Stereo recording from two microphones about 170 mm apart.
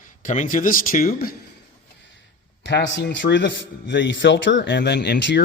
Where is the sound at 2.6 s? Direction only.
85° left.